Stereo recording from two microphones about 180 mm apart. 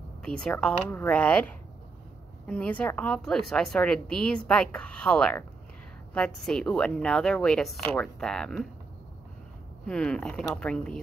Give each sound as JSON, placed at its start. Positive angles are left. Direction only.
{"t": 0.2, "sound": "a woman's voice", "side_deg": 5}
{"t": 9.8, "sound": "a woman's voice", "side_deg": 5}